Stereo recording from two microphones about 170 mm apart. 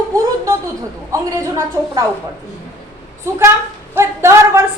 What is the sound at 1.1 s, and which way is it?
Speech, 15° right (ahead or behind).